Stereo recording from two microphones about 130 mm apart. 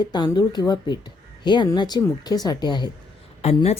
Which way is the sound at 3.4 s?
55° left (ahead or behind).